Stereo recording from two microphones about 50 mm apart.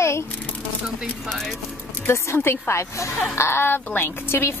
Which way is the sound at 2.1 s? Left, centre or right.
Left.